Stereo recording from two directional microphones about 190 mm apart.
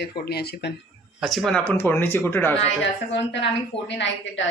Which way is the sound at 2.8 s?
70° left (ahead or behind).